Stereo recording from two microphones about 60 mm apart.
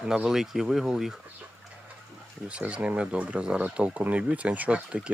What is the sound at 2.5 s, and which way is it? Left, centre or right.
Speech, centre.